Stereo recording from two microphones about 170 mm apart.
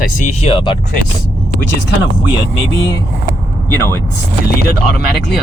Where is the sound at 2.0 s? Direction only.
90° left.